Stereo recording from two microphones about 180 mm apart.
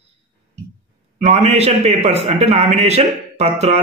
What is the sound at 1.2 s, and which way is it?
A man's voice, 35° right (ahead or behind).